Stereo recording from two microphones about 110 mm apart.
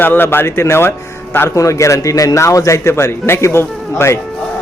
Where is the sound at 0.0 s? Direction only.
20° left (ahead or behind).